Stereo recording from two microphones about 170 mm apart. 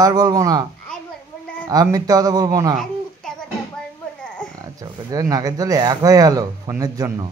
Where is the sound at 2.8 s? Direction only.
5° left (ahead or behind).